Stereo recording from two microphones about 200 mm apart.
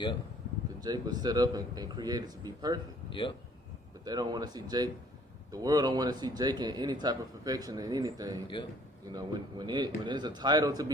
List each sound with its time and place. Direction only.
0.8 s speech: 20° right (ahead or behind)
3.1 s speech: 25° left (ahead or behind)
4.0 s speech: 20° right (ahead or behind)